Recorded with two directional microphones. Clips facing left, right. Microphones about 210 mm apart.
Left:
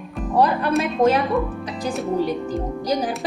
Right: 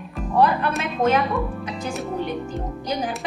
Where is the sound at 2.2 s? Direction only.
35° left (ahead or behind).